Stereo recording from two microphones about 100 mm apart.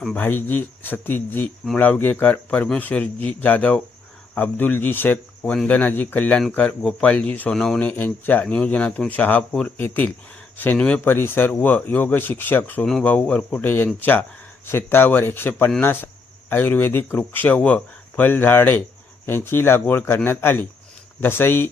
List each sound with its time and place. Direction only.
0.2 s speech: 20° left (ahead or behind)
12.8 s speech: 5° left (ahead or behind)